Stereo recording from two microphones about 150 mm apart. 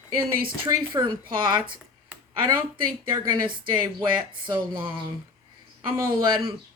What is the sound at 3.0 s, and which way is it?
Speech, 30° right (ahead or behind).